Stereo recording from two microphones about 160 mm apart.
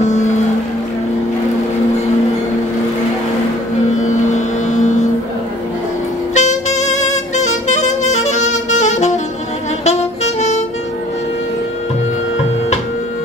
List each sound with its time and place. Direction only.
0.0 s music: 45° left (ahead or behind)
4.1 s vehicle: 50° left (ahead or behind)
6.3 s saxophone: 45° left (ahead or behind)